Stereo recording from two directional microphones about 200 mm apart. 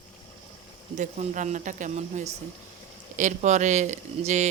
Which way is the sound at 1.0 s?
40° right (ahead or behind).